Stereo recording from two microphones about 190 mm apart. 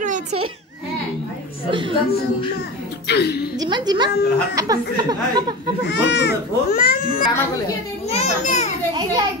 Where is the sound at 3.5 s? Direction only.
20° right (ahead or behind).